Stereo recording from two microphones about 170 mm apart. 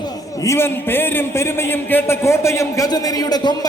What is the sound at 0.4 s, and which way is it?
A man's voice, 15° left (ahead or behind).